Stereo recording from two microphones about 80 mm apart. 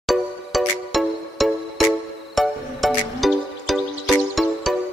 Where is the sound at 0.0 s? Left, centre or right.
Centre.